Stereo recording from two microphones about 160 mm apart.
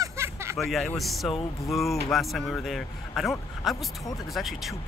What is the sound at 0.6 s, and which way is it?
Speech, centre (ahead or behind).